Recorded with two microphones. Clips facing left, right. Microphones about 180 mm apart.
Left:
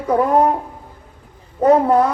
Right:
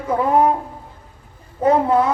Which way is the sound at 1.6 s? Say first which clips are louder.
Left 3 dB; 40° left (ahead or behind).